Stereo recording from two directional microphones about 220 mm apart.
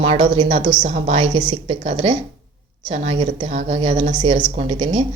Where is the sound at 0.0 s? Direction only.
25° right (ahead or behind).